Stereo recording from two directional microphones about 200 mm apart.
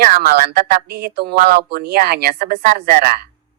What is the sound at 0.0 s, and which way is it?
A man's voice, 45° right (ahead or behind).